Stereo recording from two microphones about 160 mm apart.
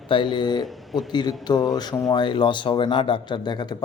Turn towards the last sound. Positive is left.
turn(degrees=25)  # may be behind; listen again after turning